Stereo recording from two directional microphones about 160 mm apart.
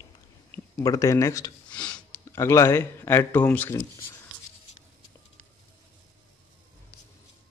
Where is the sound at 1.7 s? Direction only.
10° left (ahead or behind).